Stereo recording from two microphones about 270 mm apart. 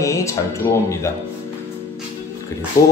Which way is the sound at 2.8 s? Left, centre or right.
Left.